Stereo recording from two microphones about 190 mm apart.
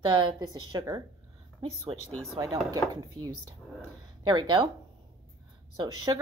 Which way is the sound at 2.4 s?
25° right (ahead or behind).